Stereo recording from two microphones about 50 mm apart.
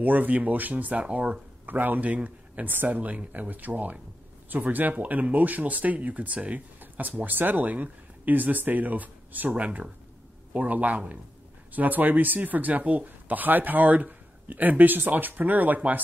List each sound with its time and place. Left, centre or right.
0.0 s speech: right
1.7 s speech: right